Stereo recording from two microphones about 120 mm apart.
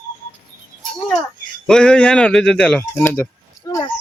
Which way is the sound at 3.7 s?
30° left (ahead or behind).